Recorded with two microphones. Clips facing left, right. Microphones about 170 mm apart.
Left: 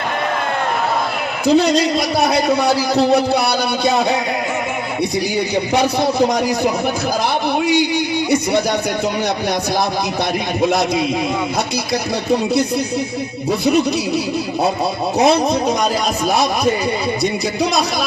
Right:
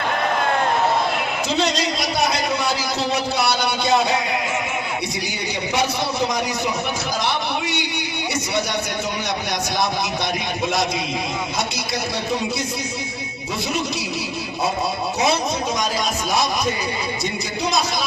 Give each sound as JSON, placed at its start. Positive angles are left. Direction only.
{"t": 1.5, "sound": "a man's voice", "side_deg": 60}
{"t": 5.7, "sound": "a man's voice", "side_deg": 55}
{"t": 10.6, "sound": "a man's voice", "side_deg": 55}